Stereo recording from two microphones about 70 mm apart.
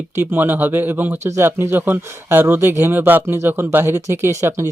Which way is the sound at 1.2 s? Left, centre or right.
Right.